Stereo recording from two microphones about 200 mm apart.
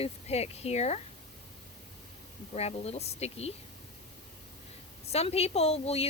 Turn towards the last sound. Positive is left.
turn(degrees=30)  # may be behind; listen again after turning